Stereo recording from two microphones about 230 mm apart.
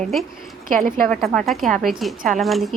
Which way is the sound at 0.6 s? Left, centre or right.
Right.